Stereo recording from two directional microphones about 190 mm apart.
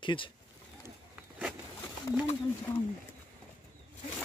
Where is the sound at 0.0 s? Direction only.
25° left (ahead or behind).